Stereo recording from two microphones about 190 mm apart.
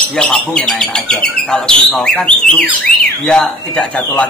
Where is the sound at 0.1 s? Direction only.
5° left (ahead or behind).